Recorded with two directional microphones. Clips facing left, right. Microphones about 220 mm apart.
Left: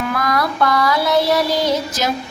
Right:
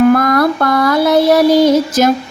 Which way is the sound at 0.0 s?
50° right (ahead or behind).